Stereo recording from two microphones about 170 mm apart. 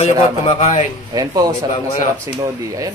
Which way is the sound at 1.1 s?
20° right (ahead or behind).